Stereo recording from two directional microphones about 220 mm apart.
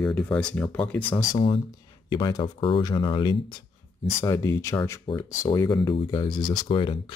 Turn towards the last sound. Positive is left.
turn(degrees=20)  # may be behind; listen again after turning